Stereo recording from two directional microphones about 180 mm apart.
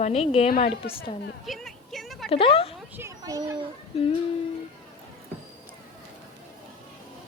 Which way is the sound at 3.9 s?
35° left (ahead or behind).